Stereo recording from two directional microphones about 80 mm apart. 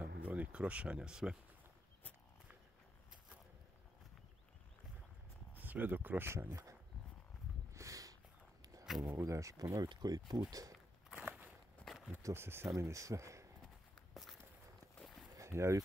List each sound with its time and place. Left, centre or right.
0.0 s speech: centre
5.5 s speech: right
6.5 s speech: right
7.7 s a sound: right
9.1 s speech: right
9.8 s speech: right
11.1 s walk: centre
11.8 s a sound: centre
12.2 s speech: right
13.9 s walk: centre
15.3 s a sound: right